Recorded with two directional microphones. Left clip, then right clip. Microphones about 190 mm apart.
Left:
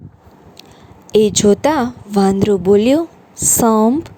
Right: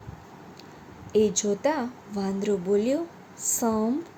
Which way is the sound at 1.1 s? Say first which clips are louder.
Left 12 dB; 55° left (ahead or behind).